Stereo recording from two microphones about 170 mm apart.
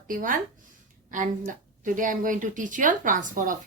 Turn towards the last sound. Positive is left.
turn(degrees=-50)  # may be behind; listen again after turning